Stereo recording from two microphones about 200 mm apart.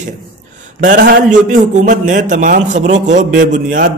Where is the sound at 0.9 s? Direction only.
55° right (ahead or behind).